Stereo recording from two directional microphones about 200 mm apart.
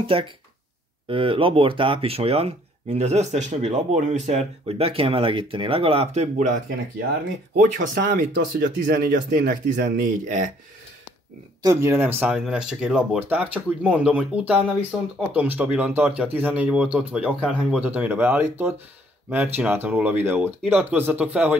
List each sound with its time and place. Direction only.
0.0 s speech: 25° right (ahead or behind)
7.5 s speech: 45° right (ahead or behind)
11.6 s speech: 15° right (ahead or behind)